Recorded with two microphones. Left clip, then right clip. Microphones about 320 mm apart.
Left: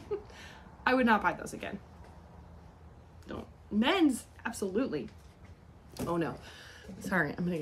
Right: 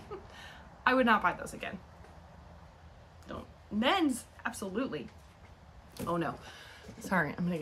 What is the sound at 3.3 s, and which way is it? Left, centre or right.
Speech, centre.